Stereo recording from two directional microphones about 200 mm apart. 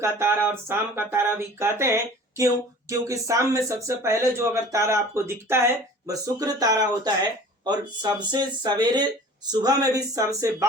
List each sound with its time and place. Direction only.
0.0 s speech: 10° right (ahead or behind)
3.1 s speech: 15° right (ahead or behind)